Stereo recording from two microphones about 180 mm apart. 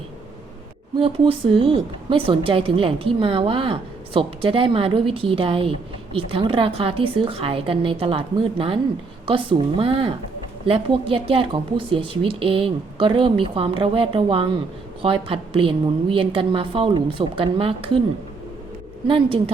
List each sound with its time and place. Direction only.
0.9 s speech: 30° right (ahead or behind)
19.0 s speech: 30° right (ahead or behind)